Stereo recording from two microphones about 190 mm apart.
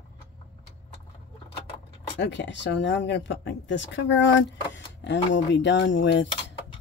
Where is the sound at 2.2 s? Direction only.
70° left (ahead or behind).